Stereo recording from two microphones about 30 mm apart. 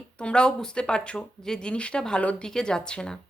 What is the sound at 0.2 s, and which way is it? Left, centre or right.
Speech, left.